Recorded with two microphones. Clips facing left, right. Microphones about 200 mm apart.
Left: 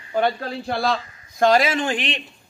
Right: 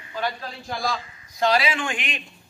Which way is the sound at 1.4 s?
45° left (ahead or behind).